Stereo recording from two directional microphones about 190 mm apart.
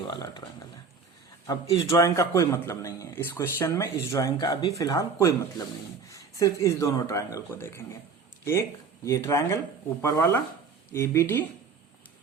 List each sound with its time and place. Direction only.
0.1 s speech: 20° left (ahead or behind)
1.5 s a man's voice: 20° left (ahead or behind)
9.0 s a man's voice: 15° left (ahead or behind)